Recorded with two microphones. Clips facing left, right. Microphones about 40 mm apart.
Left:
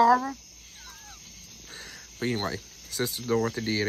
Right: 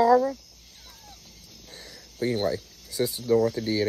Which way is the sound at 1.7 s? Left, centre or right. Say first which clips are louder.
Left 2 dB; left.